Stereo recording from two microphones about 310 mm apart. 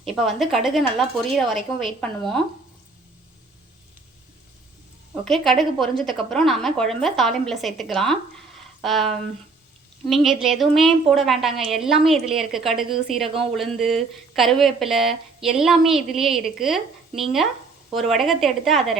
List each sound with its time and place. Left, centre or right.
0.0 s a woman's voice: centre
5.2 s a woman's voice: centre